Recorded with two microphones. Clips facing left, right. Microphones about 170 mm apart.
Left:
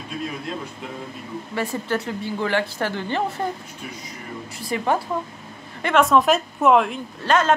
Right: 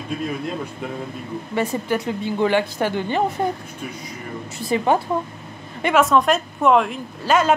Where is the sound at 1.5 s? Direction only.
20° right (ahead or behind).